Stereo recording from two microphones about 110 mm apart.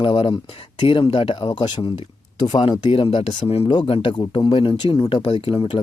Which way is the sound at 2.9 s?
55° left (ahead or behind).